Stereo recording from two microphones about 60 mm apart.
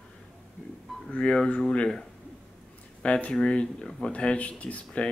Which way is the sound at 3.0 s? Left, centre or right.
Centre.